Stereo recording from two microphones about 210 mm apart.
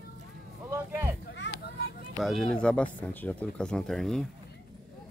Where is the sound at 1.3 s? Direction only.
55° left (ahead or behind).